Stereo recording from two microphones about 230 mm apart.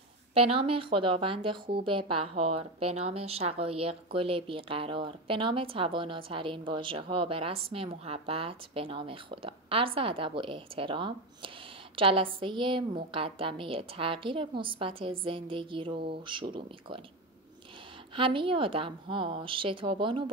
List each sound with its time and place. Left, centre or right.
0.3 s speech: right
18.1 s speech: right